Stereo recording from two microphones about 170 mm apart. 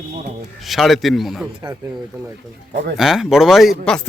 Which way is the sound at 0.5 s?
Centre (ahead or behind).